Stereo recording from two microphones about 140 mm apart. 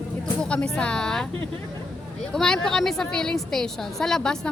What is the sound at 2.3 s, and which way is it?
A woman's voice, 5° left (ahead or behind).